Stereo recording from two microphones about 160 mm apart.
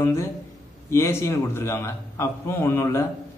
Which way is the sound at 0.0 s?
15° left (ahead or behind).